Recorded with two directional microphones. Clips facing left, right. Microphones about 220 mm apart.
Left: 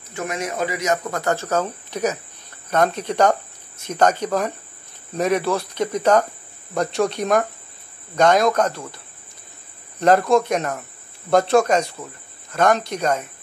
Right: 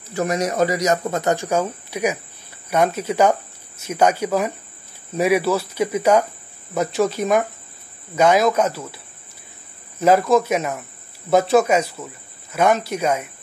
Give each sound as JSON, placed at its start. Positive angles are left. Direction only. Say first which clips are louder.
{"t": 0.1, "sound": "speech", "louder": "right 5 dB", "side_deg": -40}
{"t": 1.1, "sound": "speech", "louder": "right 2 dB", "side_deg": -20}